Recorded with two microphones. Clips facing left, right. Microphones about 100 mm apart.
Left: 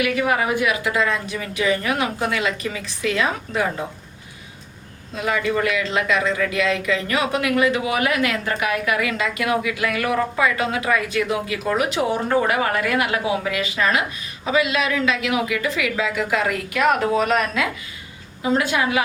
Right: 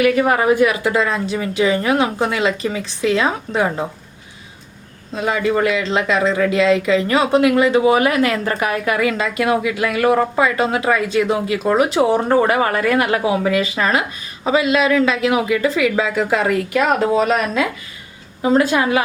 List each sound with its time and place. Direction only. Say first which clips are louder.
0.0 s speech: right 6 dB; 40° right (ahead or behind)
5.1 s speech: right 4 dB; 30° right (ahead or behind)